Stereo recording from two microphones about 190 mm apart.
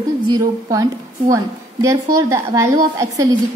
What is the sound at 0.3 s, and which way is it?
A woman's voice, 15° right (ahead or behind).